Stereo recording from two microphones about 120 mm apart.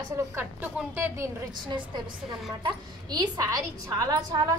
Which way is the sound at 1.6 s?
40° right (ahead or behind).